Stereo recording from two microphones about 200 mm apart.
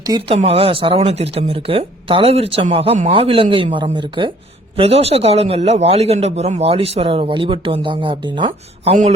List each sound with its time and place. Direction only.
0.1 s speech: 30° right (ahead or behind)